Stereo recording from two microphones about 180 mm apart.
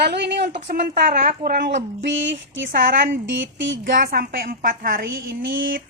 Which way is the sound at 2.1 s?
90° right.